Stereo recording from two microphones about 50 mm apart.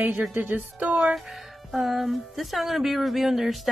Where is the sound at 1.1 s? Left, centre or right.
Centre.